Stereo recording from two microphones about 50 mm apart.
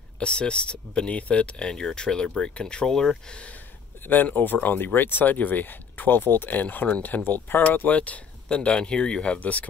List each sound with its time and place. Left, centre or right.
0.2 s speech: left
4.1 s speech: left